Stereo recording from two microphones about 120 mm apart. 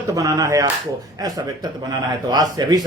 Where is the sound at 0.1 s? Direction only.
30° right (ahead or behind).